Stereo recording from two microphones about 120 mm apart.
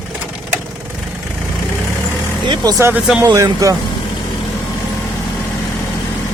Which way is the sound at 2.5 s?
35° right (ahead or behind).